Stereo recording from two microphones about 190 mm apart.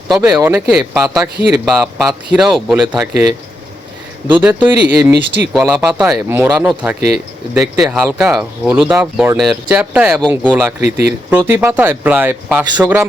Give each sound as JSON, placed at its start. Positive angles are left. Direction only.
{"t": 0.1, "sound": "speech", "side_deg": -10}
{"t": 4.3, "sound": "speech", "side_deg": -10}